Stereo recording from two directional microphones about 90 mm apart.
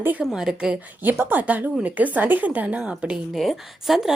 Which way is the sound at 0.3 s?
5° right (ahead or behind).